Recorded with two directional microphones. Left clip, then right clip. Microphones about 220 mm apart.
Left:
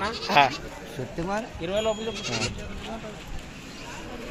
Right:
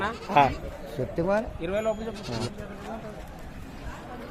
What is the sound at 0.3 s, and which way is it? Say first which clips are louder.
Speech: left 1 dB; centre (ahead or behind).